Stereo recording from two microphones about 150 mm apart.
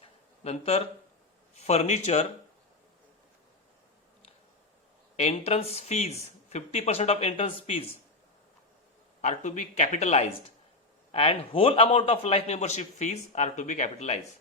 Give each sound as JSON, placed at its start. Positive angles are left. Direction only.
{"t": 0.0, "sound": "a sound", "side_deg": 40}
{"t": 1.5, "sound": "a man's voice", "side_deg": 45}
{"t": 5.1, "sound": "a man's voice", "side_deg": 45}
{"t": 9.2, "sound": "a man's voice", "side_deg": 50}